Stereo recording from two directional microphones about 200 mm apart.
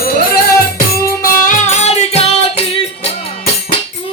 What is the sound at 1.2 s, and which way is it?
Music, 40° left (ahead or behind).